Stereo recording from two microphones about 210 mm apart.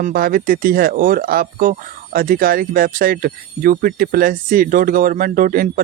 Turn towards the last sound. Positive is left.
turn(degrees=-40)  # may be behind; listen again after turning